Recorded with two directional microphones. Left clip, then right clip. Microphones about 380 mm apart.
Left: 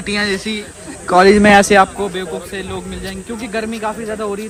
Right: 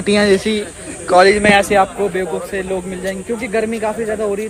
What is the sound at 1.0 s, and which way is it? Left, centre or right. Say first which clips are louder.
Speech: left 1 dB; centre.